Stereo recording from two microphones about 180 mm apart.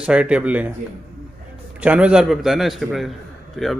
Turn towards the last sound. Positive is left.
turn(degrees=0)  # may be behind; listen again after turning